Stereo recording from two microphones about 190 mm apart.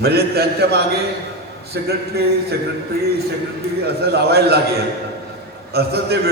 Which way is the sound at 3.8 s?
55° right (ahead or behind).